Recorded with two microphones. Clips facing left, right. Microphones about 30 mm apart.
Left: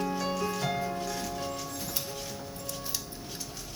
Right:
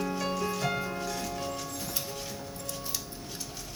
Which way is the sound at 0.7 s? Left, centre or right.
Centre.